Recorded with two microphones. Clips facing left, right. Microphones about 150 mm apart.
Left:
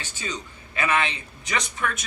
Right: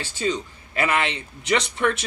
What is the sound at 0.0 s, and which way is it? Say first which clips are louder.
Speech: right 8 dB; 30° right (ahead or behind).